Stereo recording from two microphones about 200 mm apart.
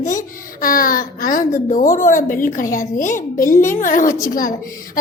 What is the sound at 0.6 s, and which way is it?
A child's voice, 45° left (ahead or behind).